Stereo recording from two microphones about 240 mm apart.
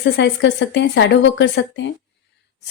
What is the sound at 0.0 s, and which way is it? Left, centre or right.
A woman's voice, left.